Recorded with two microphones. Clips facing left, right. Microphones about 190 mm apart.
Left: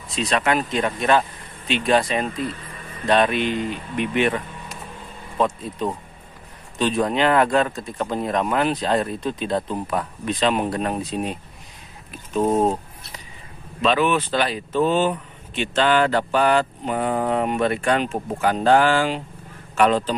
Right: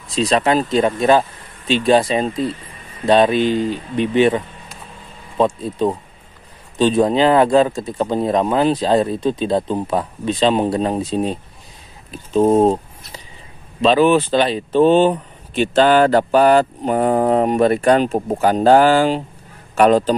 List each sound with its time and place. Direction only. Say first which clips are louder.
0.1 s speech: right 5 dB; 30° right (ahead or behind)
5.4 s a man's voice: right 6 dB; 30° right (ahead or behind)